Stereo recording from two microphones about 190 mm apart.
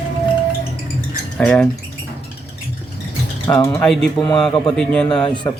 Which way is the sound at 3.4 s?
15° left (ahead or behind).